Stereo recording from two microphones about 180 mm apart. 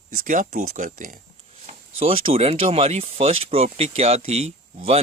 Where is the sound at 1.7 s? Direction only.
35° right (ahead or behind).